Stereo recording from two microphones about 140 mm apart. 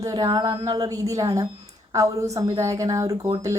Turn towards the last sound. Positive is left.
turn(degrees=-25)  # may be behind; listen again after turning